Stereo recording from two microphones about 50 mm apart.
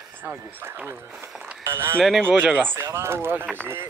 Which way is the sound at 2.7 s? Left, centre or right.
Right.